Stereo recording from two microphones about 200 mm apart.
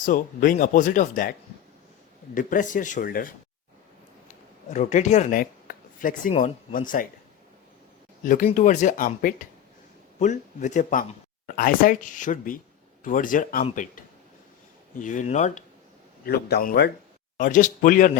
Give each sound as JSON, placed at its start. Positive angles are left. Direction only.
{"t": 0.0, "sound": "speech", "side_deg": 45}
{"t": 2.3, "sound": "speech", "side_deg": 40}
{"t": 4.7, "sound": "speech", "side_deg": 35}
{"t": 8.2, "sound": "speech", "side_deg": 40}
{"t": 14.9, "sound": "speech", "side_deg": 40}
{"t": 16.2, "sound": "speech", "side_deg": 50}